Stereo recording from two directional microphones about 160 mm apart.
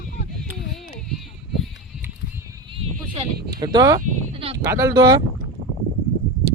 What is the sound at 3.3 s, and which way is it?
Speech, 85° right.